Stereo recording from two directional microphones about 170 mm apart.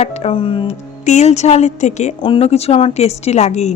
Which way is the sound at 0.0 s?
35° left (ahead or behind).